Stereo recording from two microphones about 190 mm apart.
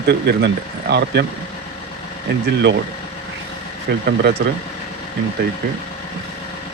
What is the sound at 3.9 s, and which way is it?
Speech, 55° right (ahead or behind).